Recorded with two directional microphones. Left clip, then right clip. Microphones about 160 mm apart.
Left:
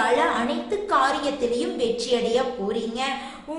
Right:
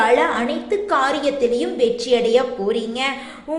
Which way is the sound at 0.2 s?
20° right (ahead or behind).